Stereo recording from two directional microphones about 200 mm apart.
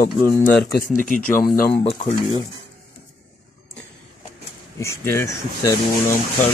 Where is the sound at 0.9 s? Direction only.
40° left (ahead or behind).